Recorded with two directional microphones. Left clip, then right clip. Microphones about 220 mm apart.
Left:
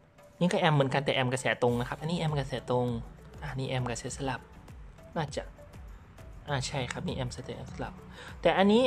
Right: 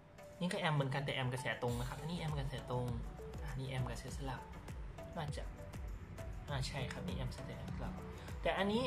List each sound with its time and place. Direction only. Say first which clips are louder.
0.4 s speech: left 12 dB; 55° left (ahead or behind)
6.5 s speech: left 11 dB; 50° left (ahead or behind)